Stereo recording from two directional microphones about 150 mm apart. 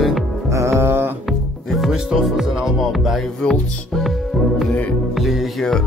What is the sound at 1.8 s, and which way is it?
Music, 5° right (ahead or behind).